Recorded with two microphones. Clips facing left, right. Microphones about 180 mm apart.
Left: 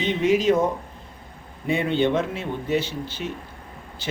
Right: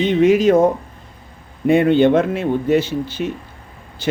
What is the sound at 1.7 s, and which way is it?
Speech, 60° right (ahead or behind).